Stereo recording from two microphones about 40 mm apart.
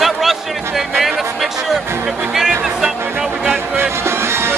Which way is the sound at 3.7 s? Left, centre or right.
Right.